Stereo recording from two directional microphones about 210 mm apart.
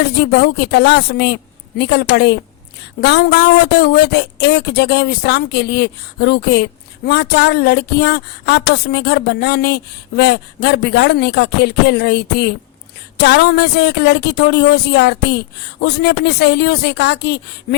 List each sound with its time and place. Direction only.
0.0 s speech: 50° left (ahead or behind)